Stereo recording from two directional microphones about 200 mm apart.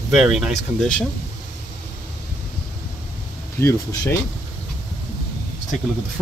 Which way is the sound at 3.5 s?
15° left (ahead or behind).